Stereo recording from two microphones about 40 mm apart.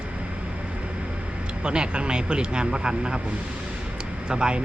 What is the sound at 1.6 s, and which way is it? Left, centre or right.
Speech, right.